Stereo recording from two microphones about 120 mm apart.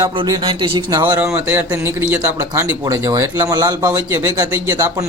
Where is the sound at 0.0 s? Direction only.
35° right (ahead or behind).